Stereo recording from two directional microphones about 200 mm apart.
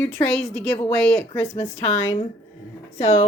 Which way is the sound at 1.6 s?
35° left (ahead or behind).